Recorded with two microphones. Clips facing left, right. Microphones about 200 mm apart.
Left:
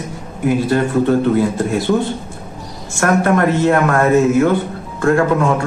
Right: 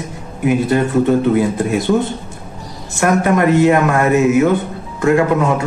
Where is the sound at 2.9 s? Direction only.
15° right (ahead or behind).